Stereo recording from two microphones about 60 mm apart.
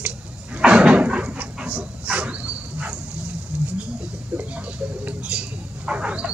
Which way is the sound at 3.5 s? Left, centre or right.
Right.